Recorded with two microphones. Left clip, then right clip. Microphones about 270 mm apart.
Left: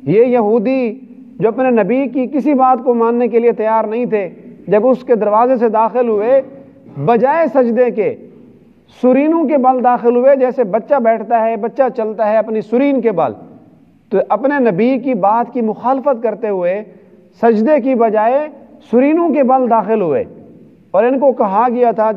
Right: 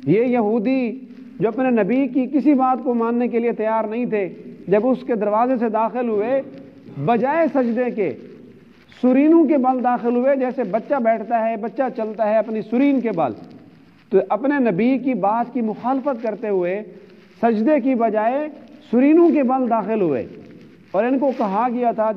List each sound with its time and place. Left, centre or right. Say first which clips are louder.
0.0 s speech: left 7 dB; left